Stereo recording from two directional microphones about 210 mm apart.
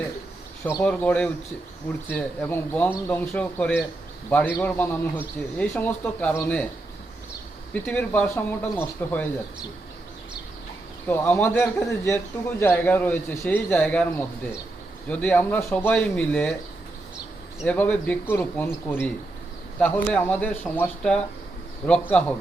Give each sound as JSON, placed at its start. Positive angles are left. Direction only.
{"t": 0.8, "sound": "a man's voice", "side_deg": 5}
{"t": 7.7, "sound": "a man's voice", "side_deg": 5}
{"t": 11.1, "sound": "a man's voice", "side_deg": 10}
{"t": 17.6, "sound": "a man's voice", "side_deg": 5}